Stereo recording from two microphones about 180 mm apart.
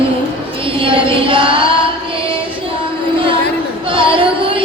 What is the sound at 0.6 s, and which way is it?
Music, 30° right (ahead or behind).